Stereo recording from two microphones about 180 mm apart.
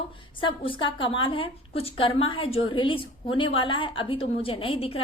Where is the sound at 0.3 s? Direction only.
30° left (ahead or behind).